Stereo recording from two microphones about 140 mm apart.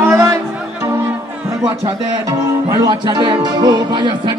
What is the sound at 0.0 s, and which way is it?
Music, 20° right (ahead or behind).